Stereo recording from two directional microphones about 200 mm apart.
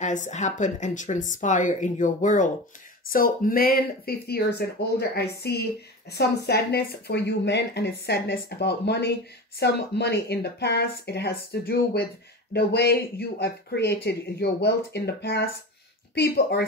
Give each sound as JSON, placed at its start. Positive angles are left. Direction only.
{"t": 0.0, "sound": "a woman's voice", "side_deg": 35}